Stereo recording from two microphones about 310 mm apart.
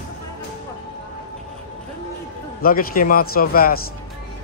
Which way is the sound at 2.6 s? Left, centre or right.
Left.